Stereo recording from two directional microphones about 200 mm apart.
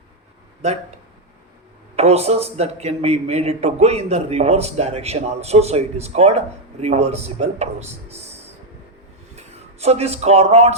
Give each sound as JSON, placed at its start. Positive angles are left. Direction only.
{"t": 2.0, "sound": "a man's voice", "side_deg": -30}